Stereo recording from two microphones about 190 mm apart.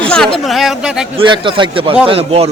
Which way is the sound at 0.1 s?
5° left (ahead or behind).